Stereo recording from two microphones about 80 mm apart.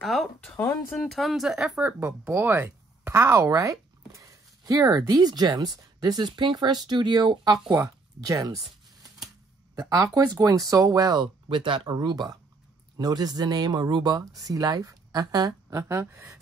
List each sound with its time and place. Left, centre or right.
0.0 s speech: centre
0.6 s speech: left
0.9 s speech: centre
2.0 s speech: right
8.2 s speech: right
9.8 s speech: right
11.4 s speech: right